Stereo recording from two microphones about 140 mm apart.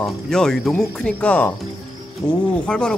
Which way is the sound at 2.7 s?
5° left (ahead or behind).